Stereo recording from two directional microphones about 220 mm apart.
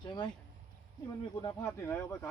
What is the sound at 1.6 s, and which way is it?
Speech, 10° left (ahead or behind).